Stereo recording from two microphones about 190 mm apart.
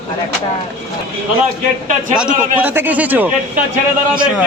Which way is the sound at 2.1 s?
5° right (ahead or behind).